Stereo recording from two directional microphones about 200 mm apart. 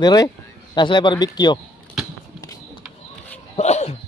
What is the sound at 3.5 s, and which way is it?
Dog, 35° left (ahead or behind).